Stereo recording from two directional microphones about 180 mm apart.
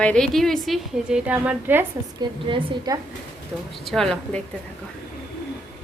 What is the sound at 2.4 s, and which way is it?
Speech, 25° right (ahead or behind).